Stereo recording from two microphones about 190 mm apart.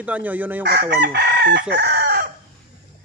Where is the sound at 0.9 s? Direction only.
60° right (ahead or behind).